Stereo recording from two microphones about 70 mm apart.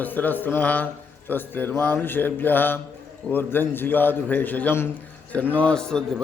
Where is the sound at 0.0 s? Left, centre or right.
Left.